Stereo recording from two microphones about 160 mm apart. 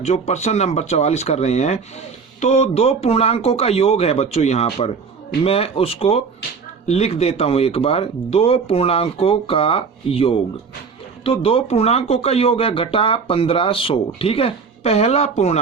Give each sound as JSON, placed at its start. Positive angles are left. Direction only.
{"t": 0.0, "sound": "speech", "side_deg": 45}